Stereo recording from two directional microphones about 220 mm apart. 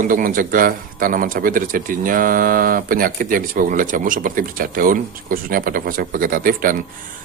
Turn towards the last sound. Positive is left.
turn(degrees=-40)  # may be behind; listen again after turning